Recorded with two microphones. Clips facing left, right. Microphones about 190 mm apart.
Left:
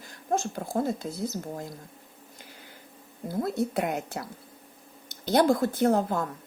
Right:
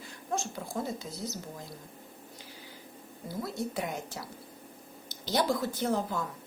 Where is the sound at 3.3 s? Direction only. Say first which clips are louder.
Left 7 dB; 55° left (ahead or behind).